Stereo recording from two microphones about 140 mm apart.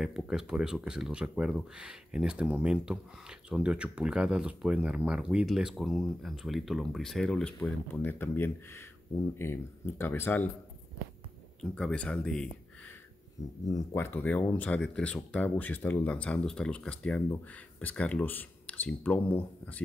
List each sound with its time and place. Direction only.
0.0 s speech: 5° right (ahead or behind)
7.9 s speech: 15° left (ahead or behind)
11.7 s speech: 5° left (ahead or behind)
13.7 s speech: 20° left (ahead or behind)